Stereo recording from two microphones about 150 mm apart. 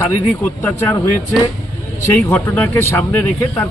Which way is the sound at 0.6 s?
15° left (ahead or behind).